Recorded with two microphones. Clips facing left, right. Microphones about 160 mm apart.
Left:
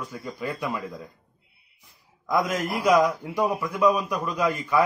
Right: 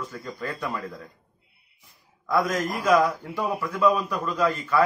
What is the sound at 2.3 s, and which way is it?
A man's voice, 15° left (ahead or behind).